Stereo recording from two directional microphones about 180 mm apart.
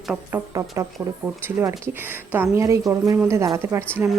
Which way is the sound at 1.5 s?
10° right (ahead or behind).